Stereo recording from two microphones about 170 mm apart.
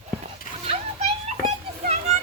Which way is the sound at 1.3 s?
40° right (ahead or behind).